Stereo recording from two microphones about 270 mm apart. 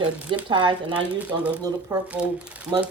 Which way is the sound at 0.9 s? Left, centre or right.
Centre.